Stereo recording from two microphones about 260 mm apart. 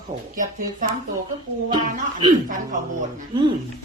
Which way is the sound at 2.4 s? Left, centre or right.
Right.